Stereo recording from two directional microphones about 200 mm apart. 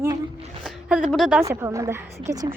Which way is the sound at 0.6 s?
5° right (ahead or behind).